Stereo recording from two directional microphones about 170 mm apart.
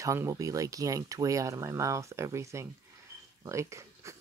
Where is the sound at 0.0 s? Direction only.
15° right (ahead or behind).